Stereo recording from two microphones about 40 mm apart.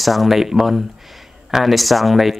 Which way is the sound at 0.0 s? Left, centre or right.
Centre.